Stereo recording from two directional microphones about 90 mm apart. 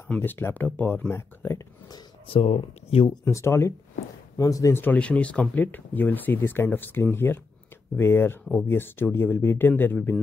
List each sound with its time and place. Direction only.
0.1 s speech: 20° left (ahead or behind)
2.2 s speech: 90° left
3.3 s speech: 30° left (ahead or behind)
4.7 s speech: 20° left (ahead or behind)